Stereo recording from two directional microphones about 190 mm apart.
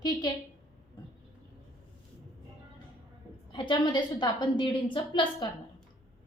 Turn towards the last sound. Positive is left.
turn(degrees=25)  # may be behind; listen again after turning